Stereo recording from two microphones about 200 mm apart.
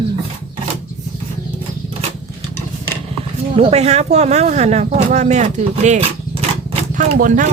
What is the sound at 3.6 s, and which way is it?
Speech, 30° right (ahead or behind).